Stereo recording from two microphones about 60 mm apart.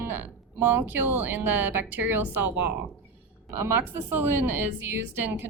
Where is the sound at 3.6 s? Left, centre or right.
Right.